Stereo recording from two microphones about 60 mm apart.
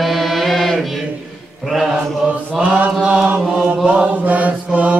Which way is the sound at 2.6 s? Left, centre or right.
Right.